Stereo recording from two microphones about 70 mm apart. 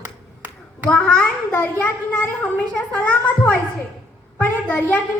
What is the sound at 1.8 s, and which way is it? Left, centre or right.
A child's voice, left.